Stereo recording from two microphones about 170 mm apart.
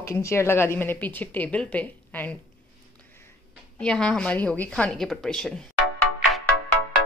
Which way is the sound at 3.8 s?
5° left (ahead or behind).